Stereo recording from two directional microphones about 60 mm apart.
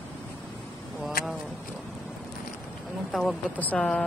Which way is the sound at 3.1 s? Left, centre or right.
Centre.